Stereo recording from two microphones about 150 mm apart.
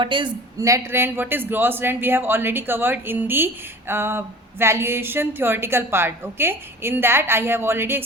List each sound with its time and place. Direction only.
0.0 s speech: 30° right (ahead or behind)
0.6 s a man's voice: 20° right (ahead or behind)